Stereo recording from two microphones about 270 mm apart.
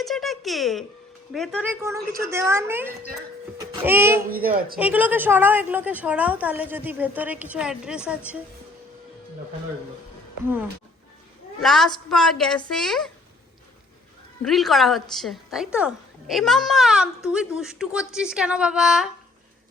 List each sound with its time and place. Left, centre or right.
0.0 s a woman's voice: centre
4.3 s a woman's voice: right
4.8 s a woman's voice: centre
11.6 s a woman's voice: centre
14.4 s a woman's voice: centre